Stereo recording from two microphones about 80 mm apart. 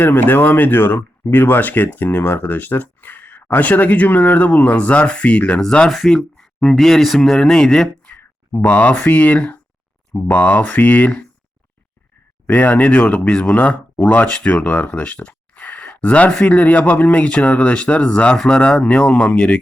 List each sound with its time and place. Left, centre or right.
0.0 s speech: left; by 7.9 s centre
8.0 s speech: left
12.5 s speech: centre